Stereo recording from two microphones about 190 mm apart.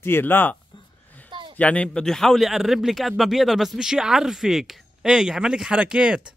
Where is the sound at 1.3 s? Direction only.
25° right (ahead or behind).